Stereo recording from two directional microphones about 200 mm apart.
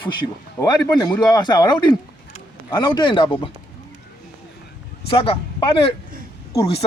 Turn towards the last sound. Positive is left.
turn(degrees=30)  # may be behind; listen again after turning